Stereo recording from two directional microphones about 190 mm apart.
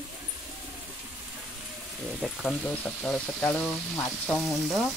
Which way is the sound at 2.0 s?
Centre (ahead or behind).